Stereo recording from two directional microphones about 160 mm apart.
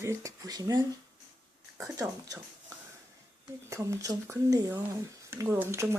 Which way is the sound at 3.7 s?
20° right (ahead or behind).